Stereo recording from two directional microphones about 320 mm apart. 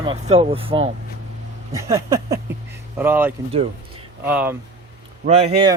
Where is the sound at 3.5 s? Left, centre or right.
Centre.